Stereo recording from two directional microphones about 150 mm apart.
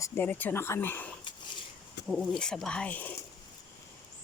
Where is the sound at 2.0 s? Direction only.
90° left.